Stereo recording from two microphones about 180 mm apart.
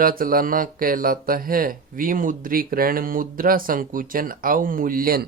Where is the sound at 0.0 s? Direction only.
55° right (ahead or behind).